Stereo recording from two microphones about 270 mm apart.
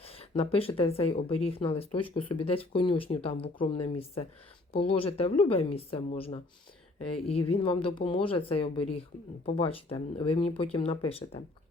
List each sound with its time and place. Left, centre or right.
0.0 s speech: left
7.4 s speech: left